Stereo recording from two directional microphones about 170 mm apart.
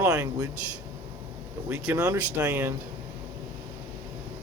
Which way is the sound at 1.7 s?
15° right (ahead or behind).